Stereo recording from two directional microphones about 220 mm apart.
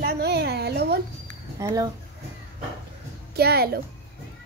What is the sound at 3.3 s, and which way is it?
Speech, 45° right (ahead or behind).